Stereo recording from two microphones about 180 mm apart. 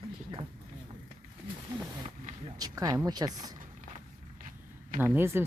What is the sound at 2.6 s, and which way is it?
Speech, 20° right (ahead or behind).